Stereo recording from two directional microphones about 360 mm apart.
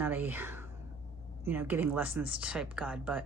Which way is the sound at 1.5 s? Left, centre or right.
Centre.